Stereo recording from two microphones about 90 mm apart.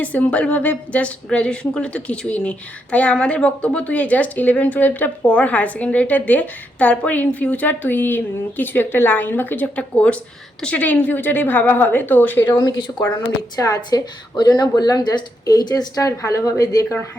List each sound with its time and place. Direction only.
0.0 s a woman's voice: 15° left (ahead or behind)
12.5 s speech: 60° left (ahead or behind)
13.6 s a woman's voice: 45° left (ahead or behind)